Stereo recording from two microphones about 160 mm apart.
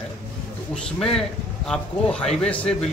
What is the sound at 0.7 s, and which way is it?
A man's voice, 5° left (ahead or behind).